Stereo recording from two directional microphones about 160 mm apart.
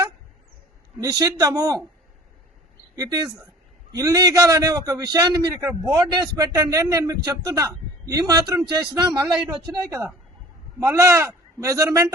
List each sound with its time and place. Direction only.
0.9 s a man's voice: 20° right (ahead or behind)
2.9 s a man's voice: 25° right (ahead or behind)